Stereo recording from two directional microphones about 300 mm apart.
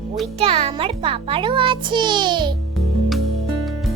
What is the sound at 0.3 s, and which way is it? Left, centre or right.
A child's voice, centre.